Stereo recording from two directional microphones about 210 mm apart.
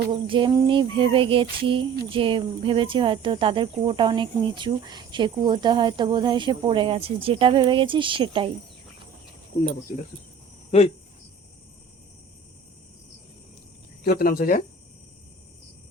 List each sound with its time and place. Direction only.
0.1 s speech: 25° right (ahead or behind)
14.0 s speech: 45° left (ahead or behind)